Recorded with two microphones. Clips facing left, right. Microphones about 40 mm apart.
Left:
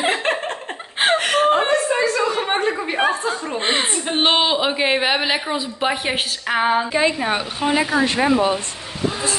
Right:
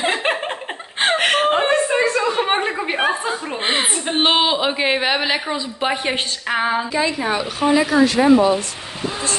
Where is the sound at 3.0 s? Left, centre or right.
Centre.